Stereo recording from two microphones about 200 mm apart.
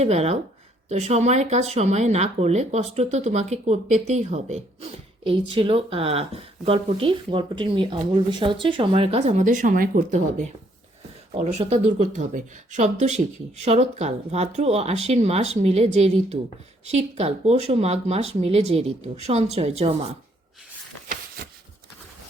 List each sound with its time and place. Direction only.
0.0 s speech: 30° right (ahead or behind)